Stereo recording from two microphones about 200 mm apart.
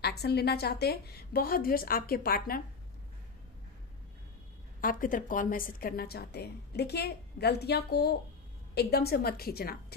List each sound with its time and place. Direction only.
0.0 s a woman's voice: 55° left (ahead or behind)
4.7 s a woman's voice: 45° left (ahead or behind)